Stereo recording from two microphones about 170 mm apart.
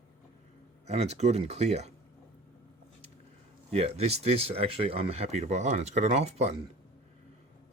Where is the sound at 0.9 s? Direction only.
40° right (ahead or behind).